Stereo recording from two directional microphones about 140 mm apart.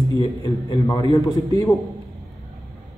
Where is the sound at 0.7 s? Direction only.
30° left (ahead or behind).